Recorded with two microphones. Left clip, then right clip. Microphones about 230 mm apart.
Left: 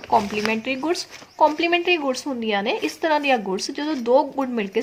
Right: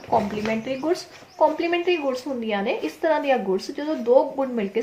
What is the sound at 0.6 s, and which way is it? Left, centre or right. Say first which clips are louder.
Speech: left 1 dB; left.